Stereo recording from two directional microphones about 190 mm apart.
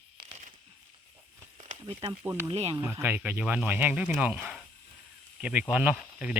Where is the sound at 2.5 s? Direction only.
30° right (ahead or behind).